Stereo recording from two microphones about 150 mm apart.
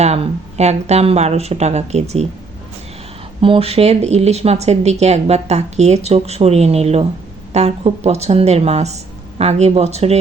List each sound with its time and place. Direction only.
0.0 s speech: 45° right (ahead or behind)
3.4 s speech: 40° right (ahead or behind)